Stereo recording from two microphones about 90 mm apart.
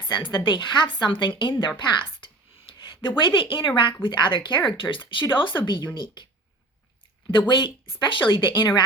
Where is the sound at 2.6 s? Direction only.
70° left (ahead or behind).